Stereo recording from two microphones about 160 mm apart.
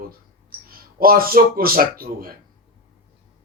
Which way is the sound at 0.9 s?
65° right (ahead or behind).